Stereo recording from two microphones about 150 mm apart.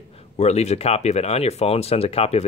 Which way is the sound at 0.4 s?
45° left (ahead or behind).